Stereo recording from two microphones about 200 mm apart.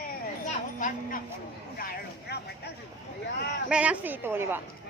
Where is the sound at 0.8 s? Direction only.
40° left (ahead or behind).